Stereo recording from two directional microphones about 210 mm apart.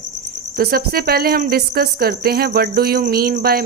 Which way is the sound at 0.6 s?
45° right (ahead or behind).